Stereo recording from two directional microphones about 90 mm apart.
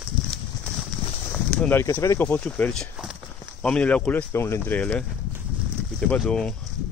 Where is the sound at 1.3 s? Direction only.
15° left (ahead or behind).